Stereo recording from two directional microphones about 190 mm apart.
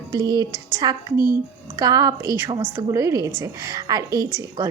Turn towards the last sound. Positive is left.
turn(degrees=-20)  # may be behind; listen again after turning